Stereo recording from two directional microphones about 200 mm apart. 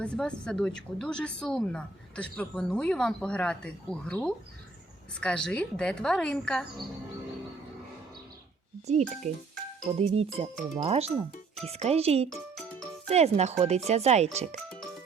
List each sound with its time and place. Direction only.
0.0 s a woman's voice: 5° left (ahead or behind)
8.9 s speech: 35° right (ahead or behind)